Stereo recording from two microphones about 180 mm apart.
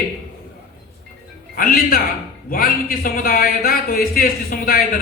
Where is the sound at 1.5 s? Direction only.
55° left (ahead or behind).